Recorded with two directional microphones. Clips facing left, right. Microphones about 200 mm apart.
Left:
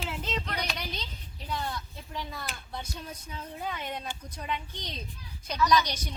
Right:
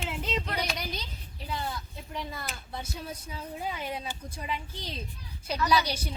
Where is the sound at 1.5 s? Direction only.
5° right (ahead or behind).